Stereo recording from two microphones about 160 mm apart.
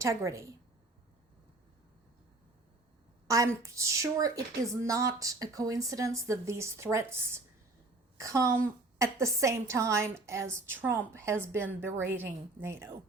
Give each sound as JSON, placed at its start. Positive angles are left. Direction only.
{"t": 0.0, "sound": "a woman's voice", "side_deg": -20}
{"t": 3.2, "sound": "a woman's voice", "side_deg": -20}